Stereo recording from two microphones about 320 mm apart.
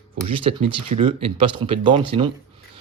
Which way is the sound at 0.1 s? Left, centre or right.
Centre.